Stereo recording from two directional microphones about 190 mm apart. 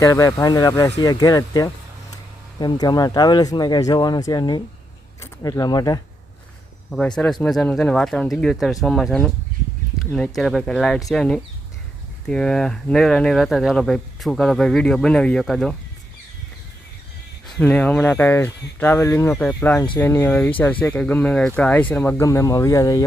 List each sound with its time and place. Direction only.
0.0 s speech: 15° left (ahead or behind)
6.9 s speech: 5° left (ahead or behind)
17.6 s speech: 5° left (ahead or behind)